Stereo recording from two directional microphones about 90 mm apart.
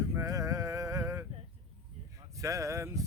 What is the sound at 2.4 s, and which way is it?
Speech, 35° right (ahead or behind).